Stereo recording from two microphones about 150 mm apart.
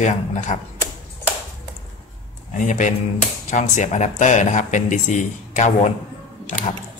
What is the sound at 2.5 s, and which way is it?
A man's voice, 55° left (ahead or behind).